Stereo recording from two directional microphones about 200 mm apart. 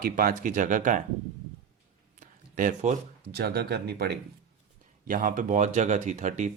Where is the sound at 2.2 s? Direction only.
40° right (ahead or behind).